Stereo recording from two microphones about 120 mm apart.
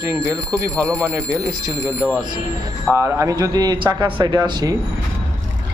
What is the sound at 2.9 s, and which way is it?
A man's voice, 25° right (ahead or behind).